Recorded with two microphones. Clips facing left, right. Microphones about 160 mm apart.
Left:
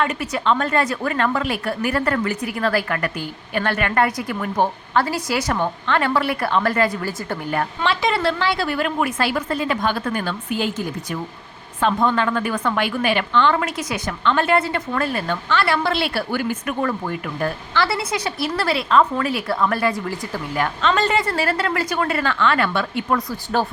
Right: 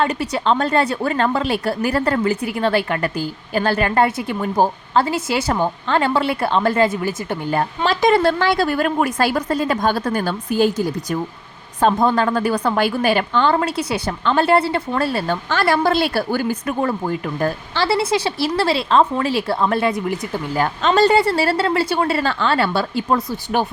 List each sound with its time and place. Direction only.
0.0 s a woman's voice: 30° right (ahead or behind)
7.9 s a woman's voice: 45° right (ahead or behind); by 20.4 s 20° right (ahead or behind)
20.6 s a woman's voice: 35° right (ahead or behind)